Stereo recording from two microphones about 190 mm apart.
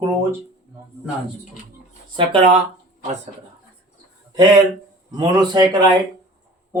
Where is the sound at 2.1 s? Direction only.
30° right (ahead or behind).